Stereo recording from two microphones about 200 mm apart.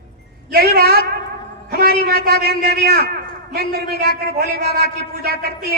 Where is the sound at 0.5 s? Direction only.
50° right (ahead or behind).